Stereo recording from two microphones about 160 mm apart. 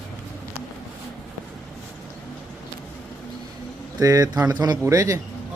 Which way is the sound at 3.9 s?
20° right (ahead or behind).